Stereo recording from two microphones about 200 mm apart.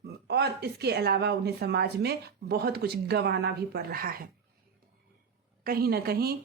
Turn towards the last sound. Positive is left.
turn(degrees=-50)  # may be behind; listen again after turning